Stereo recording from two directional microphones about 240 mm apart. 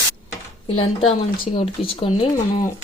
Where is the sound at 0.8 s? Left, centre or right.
Left.